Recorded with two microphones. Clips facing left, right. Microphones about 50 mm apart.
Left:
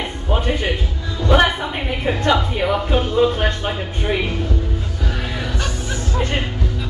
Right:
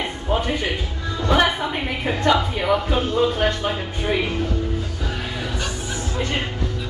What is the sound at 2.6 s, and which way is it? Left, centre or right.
Speech, centre.